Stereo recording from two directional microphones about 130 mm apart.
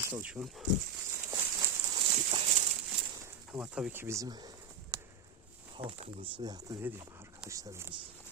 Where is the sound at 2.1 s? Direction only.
65° right (ahead or behind).